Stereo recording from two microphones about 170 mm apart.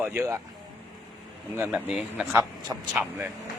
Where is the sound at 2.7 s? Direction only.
20° right (ahead or behind).